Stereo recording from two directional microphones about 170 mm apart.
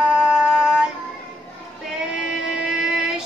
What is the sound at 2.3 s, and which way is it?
Music, 5° right (ahead or behind).